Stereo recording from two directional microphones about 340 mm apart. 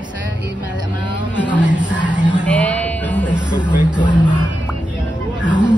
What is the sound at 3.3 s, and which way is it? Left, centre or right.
Music, centre.